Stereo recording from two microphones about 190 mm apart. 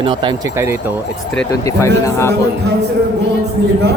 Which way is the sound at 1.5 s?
15° left (ahead or behind).